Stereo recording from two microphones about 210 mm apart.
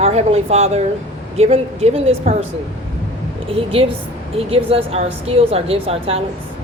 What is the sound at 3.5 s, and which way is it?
A woman's voice, 25° right (ahead or behind).